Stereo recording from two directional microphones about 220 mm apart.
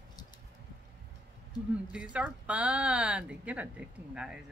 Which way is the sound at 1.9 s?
5° right (ahead or behind).